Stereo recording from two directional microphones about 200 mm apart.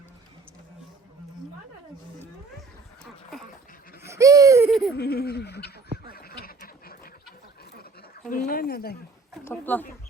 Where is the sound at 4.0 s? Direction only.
15° right (ahead or behind).